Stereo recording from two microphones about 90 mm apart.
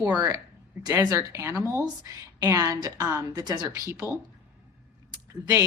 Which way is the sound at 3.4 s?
45° right (ahead or behind).